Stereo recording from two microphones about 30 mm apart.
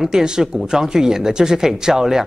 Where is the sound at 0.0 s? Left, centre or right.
Centre.